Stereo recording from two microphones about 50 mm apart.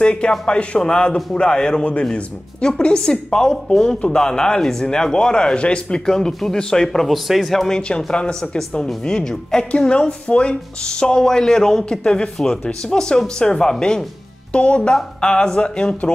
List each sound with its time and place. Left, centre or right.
0.0 s speech: left
9.7 s speech: left